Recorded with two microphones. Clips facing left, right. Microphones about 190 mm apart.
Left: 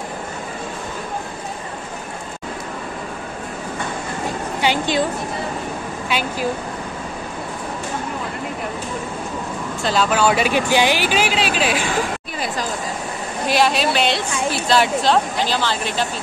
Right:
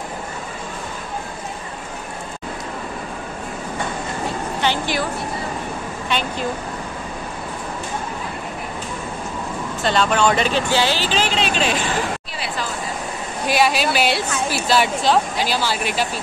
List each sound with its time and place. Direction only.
4.6 s a sound: 15° left (ahead or behind)
9.8 s speech: 5° left (ahead or behind)
13.5 s a woman's voice: centre (ahead or behind)